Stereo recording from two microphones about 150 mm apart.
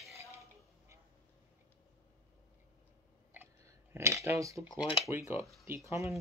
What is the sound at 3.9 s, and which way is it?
Speech, 20° right (ahead or behind).